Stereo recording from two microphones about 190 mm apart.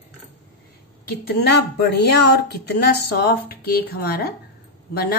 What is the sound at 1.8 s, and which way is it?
Speech, 60° left (ahead or behind).